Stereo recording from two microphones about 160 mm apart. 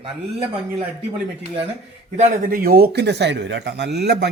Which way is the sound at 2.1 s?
45° right (ahead or behind).